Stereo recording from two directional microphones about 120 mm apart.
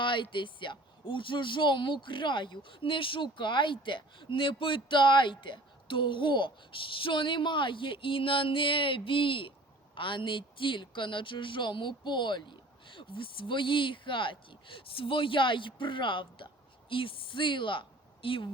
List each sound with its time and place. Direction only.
0.0 s a woman's voice: 45° left (ahead or behind)